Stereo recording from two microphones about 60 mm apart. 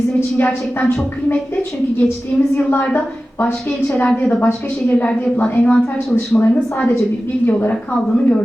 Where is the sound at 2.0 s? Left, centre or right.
Left.